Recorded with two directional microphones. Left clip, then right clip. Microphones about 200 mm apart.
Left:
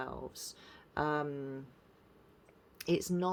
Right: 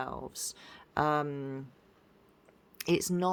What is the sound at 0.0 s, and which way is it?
Speech, 30° right (ahead or behind).